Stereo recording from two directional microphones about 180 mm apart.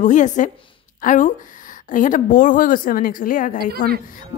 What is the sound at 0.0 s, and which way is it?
Speech, 45° left (ahead or behind).